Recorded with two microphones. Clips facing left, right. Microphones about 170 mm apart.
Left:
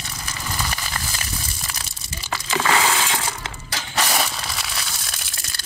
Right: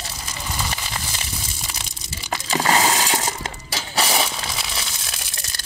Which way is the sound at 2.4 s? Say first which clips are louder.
Right 1 dB; 35° right (ahead or behind).